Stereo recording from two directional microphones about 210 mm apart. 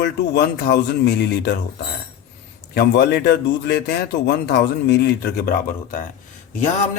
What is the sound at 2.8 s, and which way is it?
Speech, 50° left (ahead or behind).